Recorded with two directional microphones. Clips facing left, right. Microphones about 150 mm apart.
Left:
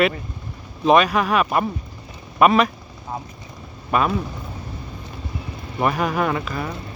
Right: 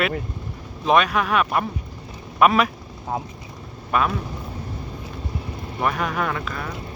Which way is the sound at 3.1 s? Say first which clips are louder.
Right 3 dB; 70° right (ahead or behind).